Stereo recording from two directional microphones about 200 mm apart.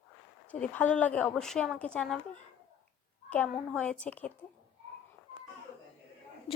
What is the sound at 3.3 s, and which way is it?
Speech, 5° left (ahead or behind).